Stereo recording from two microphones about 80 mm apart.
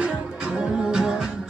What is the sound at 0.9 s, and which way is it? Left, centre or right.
Music, centre.